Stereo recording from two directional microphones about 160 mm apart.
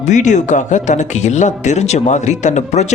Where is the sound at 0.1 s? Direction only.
50° left (ahead or behind).